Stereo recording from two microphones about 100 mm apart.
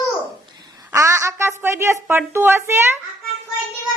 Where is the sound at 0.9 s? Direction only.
30° right (ahead or behind).